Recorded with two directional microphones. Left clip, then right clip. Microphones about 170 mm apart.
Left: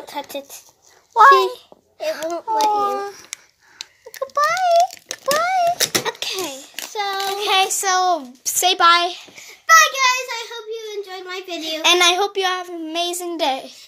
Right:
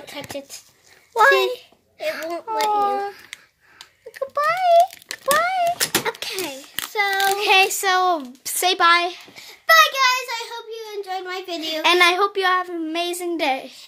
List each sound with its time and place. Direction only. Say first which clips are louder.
1.1 s a child's voice: left 5 dB; 25° right (ahead or behind)
3.7 s a sound: left 4 dB; 5° right (ahead or behind)
5.1 s a sound: left 1 dB; 15° right (ahead or behind)
6.0 s a child's voice: left 2 dB; 10° right (ahead or behind)
9.3 s child singing: left 3 dB; 15° right (ahead or behind)
11.8 s a child's voice: left 1 dB; 5° right (ahead or behind)